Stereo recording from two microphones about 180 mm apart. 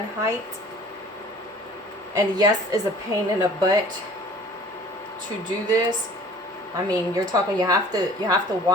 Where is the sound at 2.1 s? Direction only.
20° right (ahead or behind).